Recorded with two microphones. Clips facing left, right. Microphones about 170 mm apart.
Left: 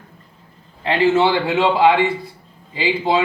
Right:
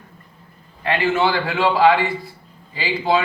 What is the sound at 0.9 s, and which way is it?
A man's voice, 25° left (ahead or behind).